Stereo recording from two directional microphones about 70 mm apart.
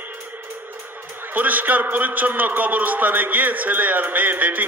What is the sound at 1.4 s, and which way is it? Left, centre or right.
A man's voice, right.